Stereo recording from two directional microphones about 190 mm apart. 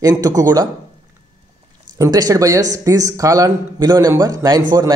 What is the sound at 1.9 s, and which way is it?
Speech, 20° right (ahead or behind).